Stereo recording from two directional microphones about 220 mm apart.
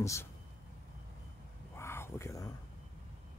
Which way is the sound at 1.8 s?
10° left (ahead or behind).